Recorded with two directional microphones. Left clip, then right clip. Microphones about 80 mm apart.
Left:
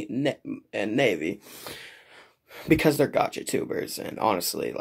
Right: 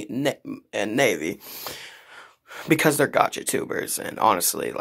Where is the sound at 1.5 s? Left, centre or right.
Left.